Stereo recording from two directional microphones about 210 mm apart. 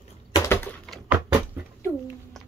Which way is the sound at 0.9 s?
5° left (ahead or behind).